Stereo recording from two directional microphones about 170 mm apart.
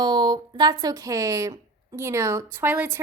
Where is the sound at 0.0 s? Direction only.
25° right (ahead or behind).